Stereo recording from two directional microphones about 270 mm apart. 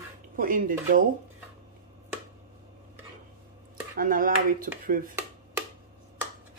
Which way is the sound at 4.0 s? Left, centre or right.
Right.